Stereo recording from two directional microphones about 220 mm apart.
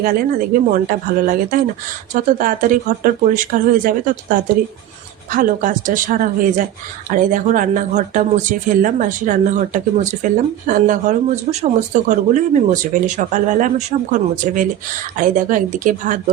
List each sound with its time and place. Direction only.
0.0 s speech: 40° right (ahead or behind)